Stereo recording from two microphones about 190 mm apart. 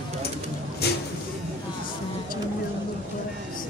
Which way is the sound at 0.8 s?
60° left (ahead or behind).